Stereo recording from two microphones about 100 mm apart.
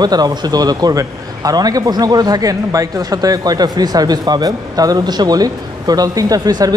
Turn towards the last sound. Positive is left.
turn(degrees=-40)  # may be behind; listen again after turning